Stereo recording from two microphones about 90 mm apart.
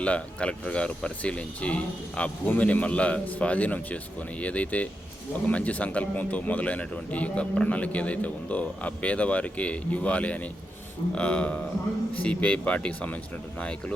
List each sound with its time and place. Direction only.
0.0 s speech: 15° left (ahead or behind)